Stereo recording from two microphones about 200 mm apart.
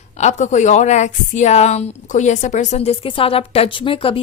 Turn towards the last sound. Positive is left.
turn(degrees=25)  # may be behind; listen again after turning